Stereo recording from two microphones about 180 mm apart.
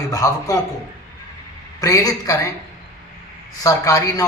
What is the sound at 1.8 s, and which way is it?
Speech, 20° left (ahead or behind).